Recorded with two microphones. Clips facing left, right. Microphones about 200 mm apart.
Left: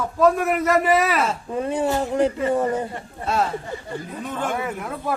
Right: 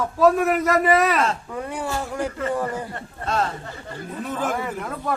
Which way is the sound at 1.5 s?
20° left (ahead or behind).